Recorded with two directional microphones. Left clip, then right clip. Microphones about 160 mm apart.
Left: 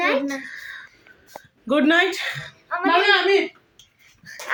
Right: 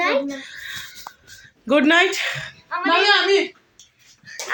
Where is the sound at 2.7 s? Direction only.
50° left (ahead or behind).